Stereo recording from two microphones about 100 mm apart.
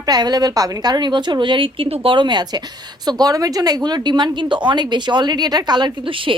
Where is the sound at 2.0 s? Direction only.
50° right (ahead or behind).